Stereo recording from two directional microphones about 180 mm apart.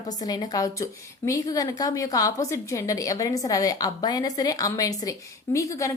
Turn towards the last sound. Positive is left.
turn(degrees=15)  # may be behind; listen again after turning